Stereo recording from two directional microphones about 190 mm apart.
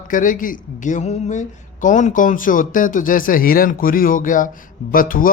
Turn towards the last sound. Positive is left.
turn(degrees=45)  # may be behind; listen again after turning